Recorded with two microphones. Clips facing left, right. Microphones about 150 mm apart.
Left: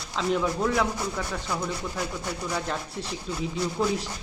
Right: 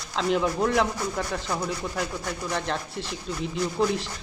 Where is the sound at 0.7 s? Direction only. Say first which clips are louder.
Right 2 dB; 30° right (ahead or behind).